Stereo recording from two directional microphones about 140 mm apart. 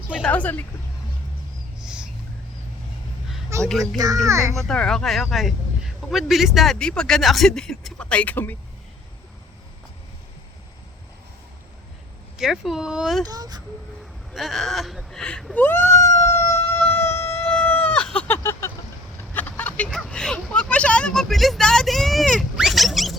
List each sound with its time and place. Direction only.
0.2 s a woman's voice: 10° left (ahead or behind)
1.8 s a sound: 5° right (ahead or behind)
3.6 s speech: 5° left (ahead or behind)
3.9 s speech: 25° right (ahead or behind)
4.7 s speech: 5° left (ahead or behind)
12.4 s speech: centre (ahead or behind)
13.2 s speech: 30° right (ahead or behind)
14.3 s speech: centre (ahead or behind); by 16.6 s 20° left (ahead or behind)
16.6 s chicken: 20° left (ahead or behind)
19.3 s vehicle: 15° left (ahead or behind)